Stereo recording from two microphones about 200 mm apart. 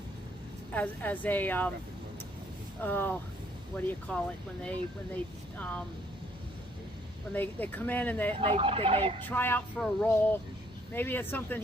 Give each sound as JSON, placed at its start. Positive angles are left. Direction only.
{"t": 0.7, "sound": "speech", "side_deg": 5}
{"t": 2.8, "sound": "speech", "side_deg": 10}
{"t": 5.5, "sound": "speech", "side_deg": 5}
{"t": 7.3, "sound": "speech", "side_deg": 10}
{"t": 8.4, "sound": "speech", "side_deg": -30}
{"t": 9.2, "sound": "speech", "side_deg": 10}